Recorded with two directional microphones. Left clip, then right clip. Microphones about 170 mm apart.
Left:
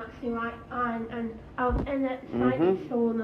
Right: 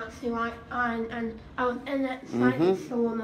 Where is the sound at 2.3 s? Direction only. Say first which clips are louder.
Right 1 dB; 35° right (ahead or behind).